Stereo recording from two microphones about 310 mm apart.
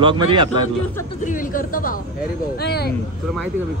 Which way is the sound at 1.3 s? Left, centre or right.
Left.